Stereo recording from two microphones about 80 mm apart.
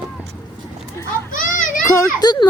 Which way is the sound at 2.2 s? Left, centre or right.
Left.